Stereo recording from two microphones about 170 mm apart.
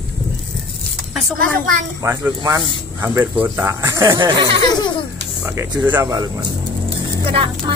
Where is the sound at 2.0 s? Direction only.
15° right (ahead or behind).